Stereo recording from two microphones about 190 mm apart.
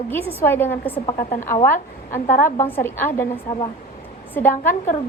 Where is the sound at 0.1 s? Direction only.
10° left (ahead or behind).